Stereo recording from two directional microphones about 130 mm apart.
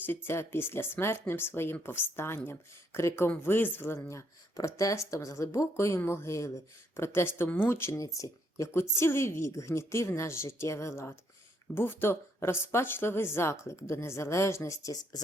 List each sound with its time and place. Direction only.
0.0 s speech: 15° left (ahead or behind)